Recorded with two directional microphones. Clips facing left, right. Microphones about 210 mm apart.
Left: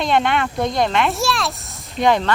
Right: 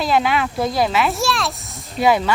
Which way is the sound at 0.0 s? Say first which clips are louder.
Even; 5° right (ahead or behind).